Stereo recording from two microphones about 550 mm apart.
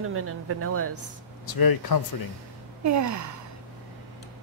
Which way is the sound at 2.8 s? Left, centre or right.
Right.